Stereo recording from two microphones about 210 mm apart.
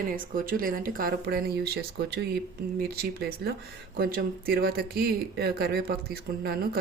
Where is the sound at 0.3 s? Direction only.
40° right (ahead or behind).